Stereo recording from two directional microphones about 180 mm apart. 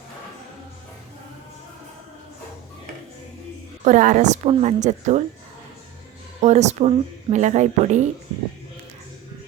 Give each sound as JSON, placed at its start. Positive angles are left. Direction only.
{"t": 3.8, "sound": "a woman's voice", "side_deg": -45}
{"t": 6.4, "sound": "a woman's voice", "side_deg": -40}